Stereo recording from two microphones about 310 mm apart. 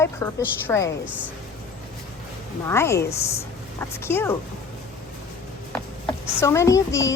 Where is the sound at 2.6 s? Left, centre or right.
Centre.